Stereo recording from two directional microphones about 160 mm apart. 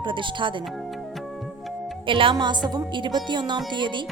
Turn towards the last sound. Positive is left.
turn(degrees=-30)  # may be behind; listen again after turning